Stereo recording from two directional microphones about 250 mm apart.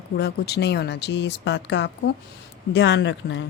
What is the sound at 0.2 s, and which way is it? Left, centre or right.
Speech, left.